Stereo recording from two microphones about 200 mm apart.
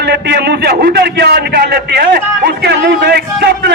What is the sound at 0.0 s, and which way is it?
A man's voice, 55° right (ahead or behind).